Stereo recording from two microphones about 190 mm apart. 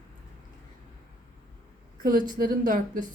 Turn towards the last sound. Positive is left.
turn(degrees=-45)  # may be behind; listen again after turning